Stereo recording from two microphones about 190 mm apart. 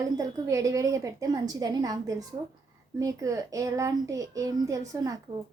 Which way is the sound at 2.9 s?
20° right (ahead or behind).